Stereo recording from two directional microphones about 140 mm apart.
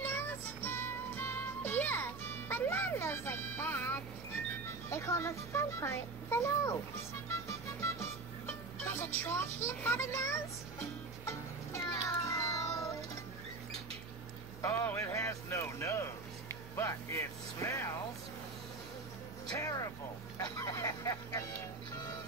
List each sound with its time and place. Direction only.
0.0 s music: 15° left (ahead or behind)
4.8 s a child's voice: 20° left (ahead or behind)
7.8 s music: 20° left (ahead or behind)
14.6 s a sound: 15° left (ahead or behind)
19.6 s a child's voice: 25° left (ahead or behind)
20.5 s vehicle: 25° left (ahead or behind)